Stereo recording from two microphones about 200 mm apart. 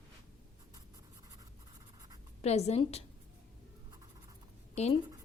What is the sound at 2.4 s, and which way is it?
Speech, 30° left (ahead or behind).